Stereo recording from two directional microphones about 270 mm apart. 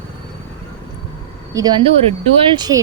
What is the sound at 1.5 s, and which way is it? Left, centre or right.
A woman's voice, centre.